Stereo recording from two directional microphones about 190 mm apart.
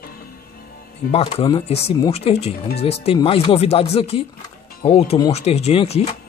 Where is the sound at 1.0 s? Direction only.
35° left (ahead or behind).